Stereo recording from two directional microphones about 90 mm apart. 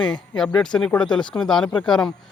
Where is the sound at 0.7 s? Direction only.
10° left (ahead or behind).